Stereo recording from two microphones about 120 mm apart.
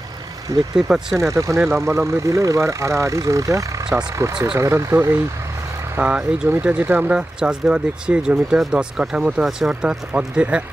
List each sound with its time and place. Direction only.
0.7 s speech: 5° right (ahead or behind)
1.3 s speech: 25° right (ahead or behind)
5.9 s speech: 10° right (ahead or behind)